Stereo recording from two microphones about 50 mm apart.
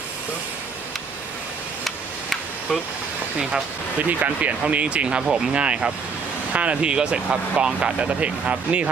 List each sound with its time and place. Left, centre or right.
4.2 s speech: right